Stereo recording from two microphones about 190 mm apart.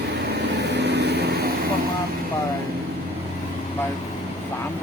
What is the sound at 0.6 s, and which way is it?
Vehicle, 65° right (ahead or behind).